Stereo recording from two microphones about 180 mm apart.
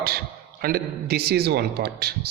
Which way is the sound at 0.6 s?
60° right (ahead or behind).